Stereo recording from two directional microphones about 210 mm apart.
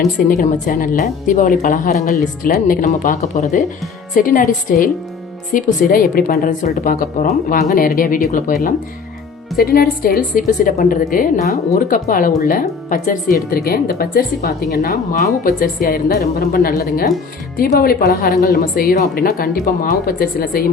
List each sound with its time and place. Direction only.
0.3 s a woman's voice: 40° left (ahead or behind)